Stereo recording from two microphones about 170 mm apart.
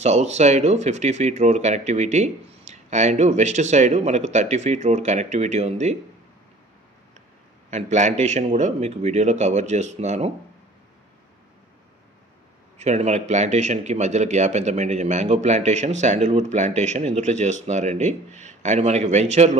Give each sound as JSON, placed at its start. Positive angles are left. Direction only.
{"t": 0.0, "sound": "a man's voice", "side_deg": -40}
{"t": 7.7, "sound": "a man's voice", "side_deg": -45}
{"t": 12.7, "sound": "a man's voice", "side_deg": -40}